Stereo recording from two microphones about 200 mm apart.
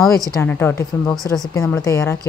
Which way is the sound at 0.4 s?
10° left (ahead or behind).